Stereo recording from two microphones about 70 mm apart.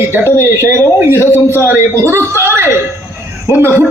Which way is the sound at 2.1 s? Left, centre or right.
Right.